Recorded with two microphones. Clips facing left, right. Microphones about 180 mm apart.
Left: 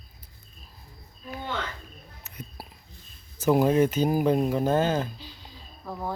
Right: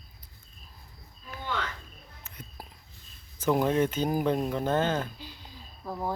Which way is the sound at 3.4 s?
10° left (ahead or behind).